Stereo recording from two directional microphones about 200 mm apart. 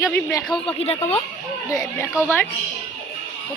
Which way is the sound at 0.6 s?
30° left (ahead or behind).